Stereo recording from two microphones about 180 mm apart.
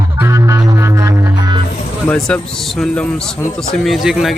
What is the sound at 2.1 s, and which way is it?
A man's voice, 5° left (ahead or behind).